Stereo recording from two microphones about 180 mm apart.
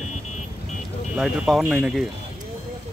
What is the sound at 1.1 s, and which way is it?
Speech, centre (ahead or behind).